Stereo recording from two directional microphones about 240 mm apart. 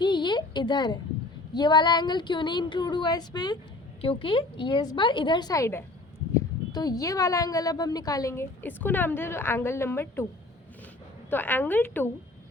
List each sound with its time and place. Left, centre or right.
0.0 s a sound: centre
1.5 s a woman's voice: centre
11.3 s speech: centre